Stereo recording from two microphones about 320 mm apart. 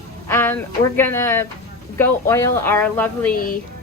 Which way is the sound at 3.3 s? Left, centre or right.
Left.